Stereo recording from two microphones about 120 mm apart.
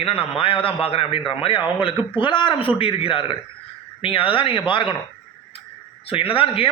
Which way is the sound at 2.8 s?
50° left (ahead or behind).